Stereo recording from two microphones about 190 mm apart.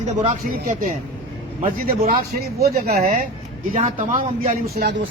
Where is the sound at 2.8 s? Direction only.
50° right (ahead or behind).